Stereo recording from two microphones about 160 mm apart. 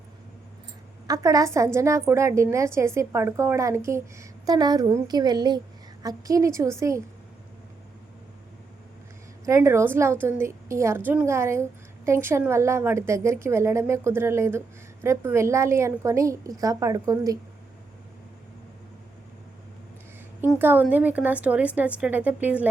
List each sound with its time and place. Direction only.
1.0 s a woman's voice: 20° right (ahead or behind)
9.5 s a woman's voice: 15° right (ahead or behind)
20.6 s a woman's voice: 10° right (ahead or behind)